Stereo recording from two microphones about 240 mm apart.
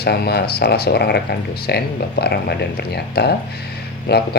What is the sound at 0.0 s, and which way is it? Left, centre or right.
Speech, left.